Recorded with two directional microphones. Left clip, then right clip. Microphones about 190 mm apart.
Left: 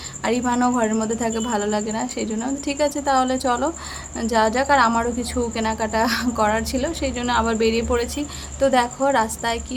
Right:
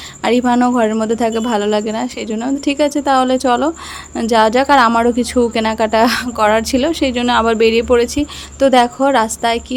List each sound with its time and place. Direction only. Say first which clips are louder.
0.3 s a woman's voice: right 7 dB; 35° right (ahead or behind)